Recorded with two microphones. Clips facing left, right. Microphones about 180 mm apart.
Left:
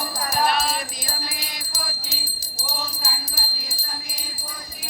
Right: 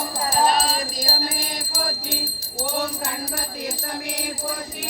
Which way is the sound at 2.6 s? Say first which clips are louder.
Right 7 dB; 65° right (ahead or behind).